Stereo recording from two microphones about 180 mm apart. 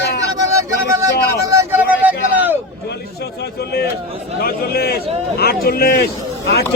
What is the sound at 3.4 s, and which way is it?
A man's voice, 60° left (ahead or behind).